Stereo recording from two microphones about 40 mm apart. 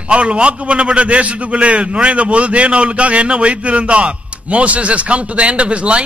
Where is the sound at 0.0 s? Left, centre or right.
Right.